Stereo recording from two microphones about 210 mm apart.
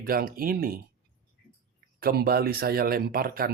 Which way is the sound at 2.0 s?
45° right (ahead or behind).